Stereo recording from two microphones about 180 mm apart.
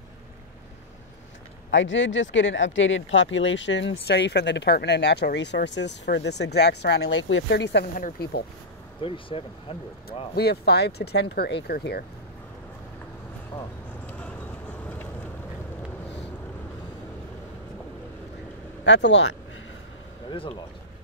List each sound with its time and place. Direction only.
1.7 s speech: 90° left; by 7.9 s 75° left (ahead or behind)
7.9 s speech: 55° left (ahead or behind)
9.0 s speech: 30° left (ahead or behind)
10.3 s speech: 60° left (ahead or behind)
13.5 s speech: 15° left (ahead or behind)
18.9 s speech: 80° left